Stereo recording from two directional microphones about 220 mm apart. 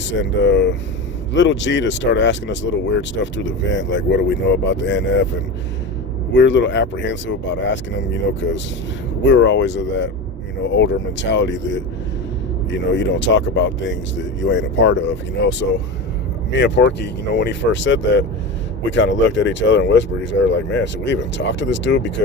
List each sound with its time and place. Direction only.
0.1 s speech: 55° left (ahead or behind)
6.3 s speech: 55° left (ahead or behind)